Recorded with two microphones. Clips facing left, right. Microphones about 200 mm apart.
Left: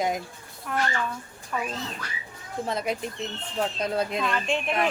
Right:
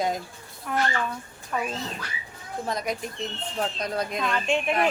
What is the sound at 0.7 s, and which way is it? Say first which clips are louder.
Speech: right 1 dB; centre (ahead or behind).